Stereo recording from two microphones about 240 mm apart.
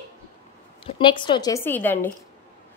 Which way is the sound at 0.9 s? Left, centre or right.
Centre.